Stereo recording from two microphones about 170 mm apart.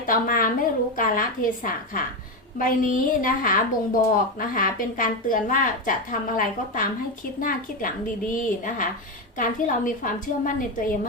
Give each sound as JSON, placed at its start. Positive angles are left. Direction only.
{"t": 0.0, "sound": "a woman's voice", "side_deg": 55}